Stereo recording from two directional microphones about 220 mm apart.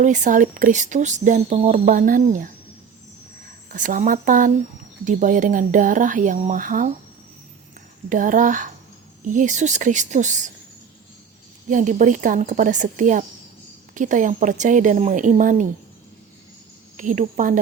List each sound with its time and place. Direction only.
0.0 s speech: 35° right (ahead or behind)
3.7 s speech: 35° right (ahead or behind)
8.1 s speech: 35° right (ahead or behind)
11.7 s speech: 35° right (ahead or behind)
17.0 s speech: 35° right (ahead or behind)